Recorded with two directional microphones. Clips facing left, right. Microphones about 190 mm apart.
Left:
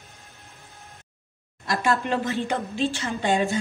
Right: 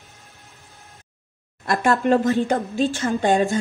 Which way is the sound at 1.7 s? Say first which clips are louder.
Right 6 dB; 50° right (ahead or behind).